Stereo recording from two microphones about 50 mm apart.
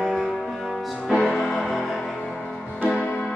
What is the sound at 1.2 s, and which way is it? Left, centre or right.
Music, centre.